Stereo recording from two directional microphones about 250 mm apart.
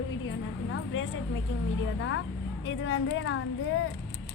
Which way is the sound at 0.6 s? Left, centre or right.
Left.